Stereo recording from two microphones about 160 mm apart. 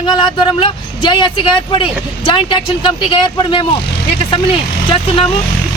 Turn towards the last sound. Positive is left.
turn(degrees=35)  # may be behind; listen again after turning